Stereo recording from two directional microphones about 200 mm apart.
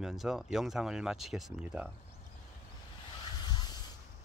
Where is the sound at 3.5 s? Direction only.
20° left (ahead or behind).